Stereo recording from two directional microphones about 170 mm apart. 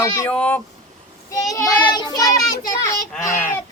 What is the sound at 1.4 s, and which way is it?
A child's voice, 20° left (ahead or behind).